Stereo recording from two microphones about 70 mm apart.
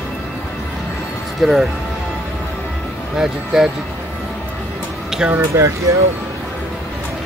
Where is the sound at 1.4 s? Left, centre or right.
Centre.